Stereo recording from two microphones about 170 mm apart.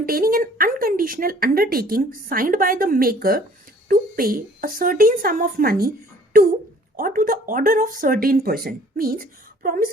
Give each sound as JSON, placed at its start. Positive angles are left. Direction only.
{"t": 0.0, "sound": "a woman's voice", "side_deg": -60}